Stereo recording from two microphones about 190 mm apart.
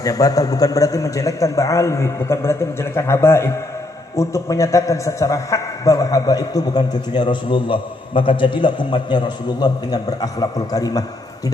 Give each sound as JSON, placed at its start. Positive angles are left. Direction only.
{"t": 0.0, "sound": "a man's voice", "side_deg": 20}